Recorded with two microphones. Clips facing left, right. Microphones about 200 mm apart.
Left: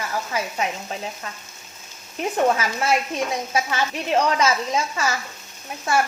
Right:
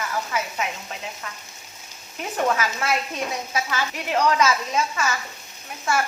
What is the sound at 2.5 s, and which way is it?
Speech, 30° left (ahead or behind).